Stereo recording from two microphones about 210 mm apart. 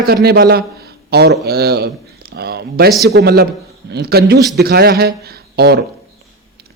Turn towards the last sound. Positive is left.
turn(degrees=-50)  # may be behind; listen again after turning